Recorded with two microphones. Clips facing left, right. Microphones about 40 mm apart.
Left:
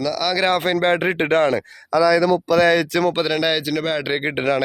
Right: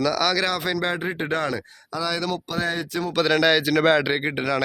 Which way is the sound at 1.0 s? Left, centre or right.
Left.